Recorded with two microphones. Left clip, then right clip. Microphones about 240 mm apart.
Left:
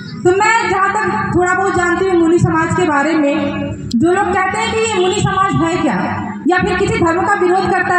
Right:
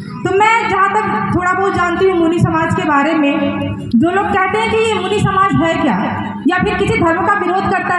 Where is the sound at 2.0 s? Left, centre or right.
Right.